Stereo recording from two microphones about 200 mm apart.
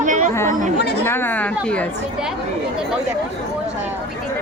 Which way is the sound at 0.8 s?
55° left (ahead or behind).